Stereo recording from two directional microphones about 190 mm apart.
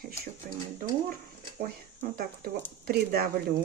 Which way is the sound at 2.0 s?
50° right (ahead or behind).